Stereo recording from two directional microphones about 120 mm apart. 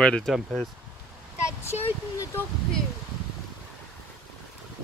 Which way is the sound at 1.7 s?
60° left (ahead or behind).